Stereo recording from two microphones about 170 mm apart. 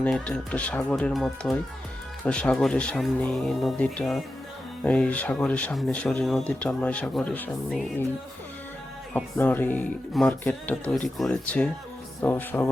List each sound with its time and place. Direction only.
0.0 s speech: 5° left (ahead or behind)
9.1 s speech: 10° left (ahead or behind)